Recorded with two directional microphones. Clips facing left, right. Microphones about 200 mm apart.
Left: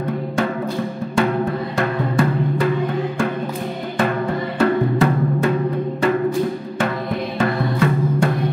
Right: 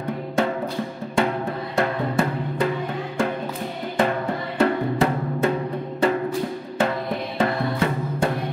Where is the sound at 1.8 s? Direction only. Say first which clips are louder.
Left 2 dB; 25° right (ahead or behind).